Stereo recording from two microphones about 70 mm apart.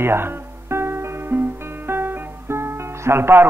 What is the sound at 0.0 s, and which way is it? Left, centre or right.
Music, right.